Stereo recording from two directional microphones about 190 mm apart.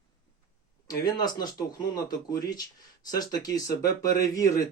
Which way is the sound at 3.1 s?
20° left (ahead or behind).